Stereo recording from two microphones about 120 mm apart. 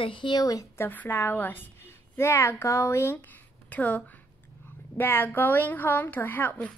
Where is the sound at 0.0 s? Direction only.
45° left (ahead or behind).